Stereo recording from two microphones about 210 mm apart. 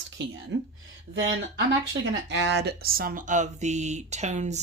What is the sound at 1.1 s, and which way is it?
Speech, 60° right (ahead or behind).